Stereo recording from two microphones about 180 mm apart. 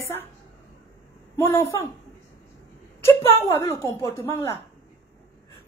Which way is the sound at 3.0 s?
15° left (ahead or behind).